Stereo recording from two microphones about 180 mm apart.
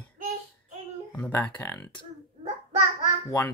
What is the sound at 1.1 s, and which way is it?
Speech, 10° left (ahead or behind).